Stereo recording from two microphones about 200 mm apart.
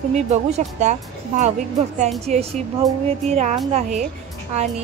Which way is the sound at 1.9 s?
35° right (ahead or behind).